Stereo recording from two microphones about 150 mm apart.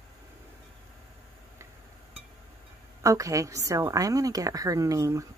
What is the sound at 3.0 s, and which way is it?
A woman's voice, 20° right (ahead or behind).